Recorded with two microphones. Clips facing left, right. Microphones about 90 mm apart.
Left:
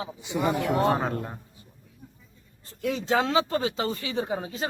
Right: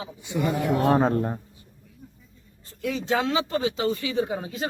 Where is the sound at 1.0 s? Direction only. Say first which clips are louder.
Right 7 dB; 35° right (ahead or behind).